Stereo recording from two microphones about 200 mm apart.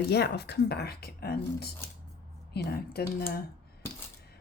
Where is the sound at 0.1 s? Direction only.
55° left (ahead or behind).